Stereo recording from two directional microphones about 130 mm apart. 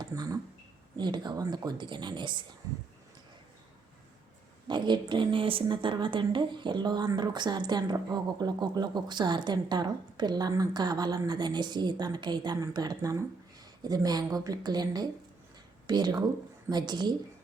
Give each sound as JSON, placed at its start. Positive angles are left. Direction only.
{"t": 0.0, "sound": "a sound", "side_deg": -30}
{"t": 0.9, "sound": "a woman's voice", "side_deg": -35}
{"t": 4.7, "sound": "a woman's voice", "side_deg": -35}